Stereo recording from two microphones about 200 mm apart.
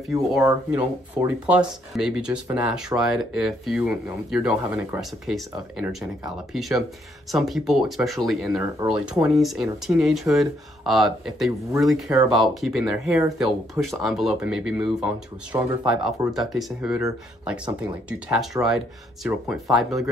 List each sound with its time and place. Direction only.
0.4 s speech: 10° right (ahead or behind)